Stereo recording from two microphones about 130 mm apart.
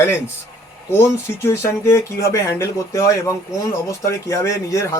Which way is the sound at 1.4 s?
20° left (ahead or behind).